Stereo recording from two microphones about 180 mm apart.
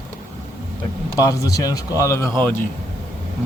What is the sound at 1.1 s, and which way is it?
Speech, 20° left (ahead or behind).